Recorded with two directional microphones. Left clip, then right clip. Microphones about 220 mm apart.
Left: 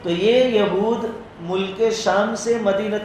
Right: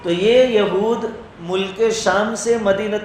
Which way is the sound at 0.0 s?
40° right (ahead or behind).